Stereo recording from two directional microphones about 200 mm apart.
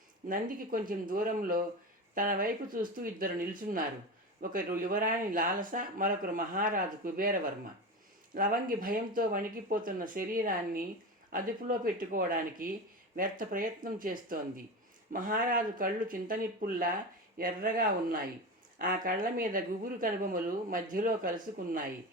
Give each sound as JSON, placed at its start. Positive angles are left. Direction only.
{"t": 0.3, "sound": "speech", "side_deg": -45}